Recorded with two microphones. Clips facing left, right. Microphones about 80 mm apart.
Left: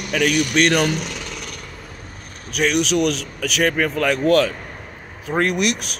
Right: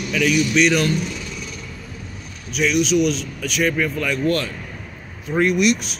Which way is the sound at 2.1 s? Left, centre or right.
Left.